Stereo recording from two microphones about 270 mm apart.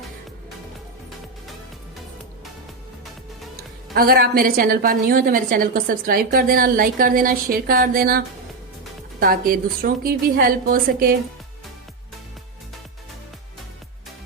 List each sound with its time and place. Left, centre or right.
3.9 s a woman's voice: right
9.2 s a woman's voice: right